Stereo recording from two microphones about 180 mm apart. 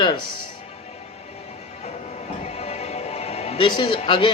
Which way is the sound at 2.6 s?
35° left (ahead or behind).